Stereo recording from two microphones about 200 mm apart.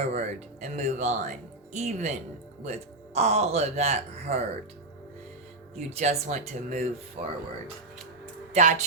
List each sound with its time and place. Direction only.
0.0 s speech: 35° right (ahead or behind)
3.2 s speech: 35° right (ahead or behind)
5.7 s speech: 30° right (ahead or behind)
8.6 s speech: 35° right (ahead or behind)